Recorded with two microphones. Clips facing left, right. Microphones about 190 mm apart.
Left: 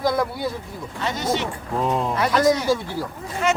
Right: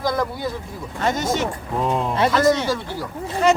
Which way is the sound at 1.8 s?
Centre (ahead or behind).